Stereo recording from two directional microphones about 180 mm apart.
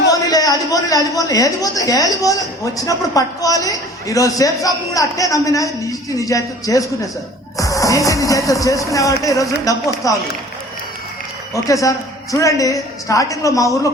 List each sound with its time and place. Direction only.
0.1 s a sound: 20° left (ahead or behind)
0.7 s a woman's voice: 20° left (ahead or behind)
11.5 s a woman's voice: 20° left (ahead or behind)